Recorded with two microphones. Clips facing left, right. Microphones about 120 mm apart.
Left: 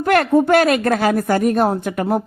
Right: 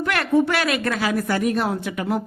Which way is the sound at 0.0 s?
45° left (ahead or behind).